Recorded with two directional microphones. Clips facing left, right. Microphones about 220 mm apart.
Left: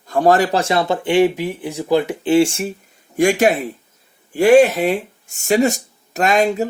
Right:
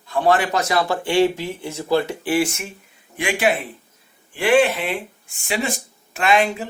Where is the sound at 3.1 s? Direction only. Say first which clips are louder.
Left 6 dB; 45° left (ahead or behind).